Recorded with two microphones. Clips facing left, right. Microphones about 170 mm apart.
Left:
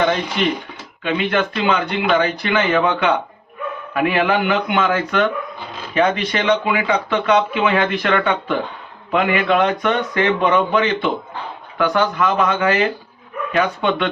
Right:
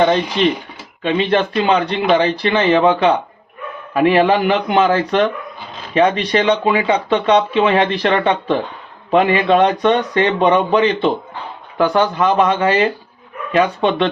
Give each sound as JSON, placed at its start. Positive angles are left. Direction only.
{"t": 1.0, "sound": "speech", "side_deg": -30}